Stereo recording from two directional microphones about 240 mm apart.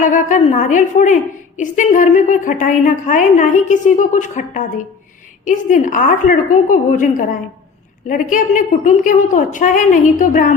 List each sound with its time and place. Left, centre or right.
0.0 s a woman's voice: left